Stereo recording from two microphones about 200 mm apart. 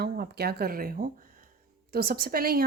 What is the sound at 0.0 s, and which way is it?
A woman's voice, 50° right (ahead or behind).